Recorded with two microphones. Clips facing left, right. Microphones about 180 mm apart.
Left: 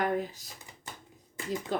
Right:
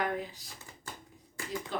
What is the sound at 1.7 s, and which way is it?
Speech, 45° left (ahead or behind).